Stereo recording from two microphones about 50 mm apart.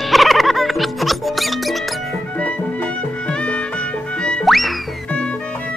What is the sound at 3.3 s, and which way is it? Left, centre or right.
Music, left.